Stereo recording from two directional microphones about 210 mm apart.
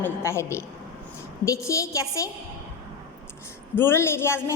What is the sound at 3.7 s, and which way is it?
Speech, 10° left (ahead or behind).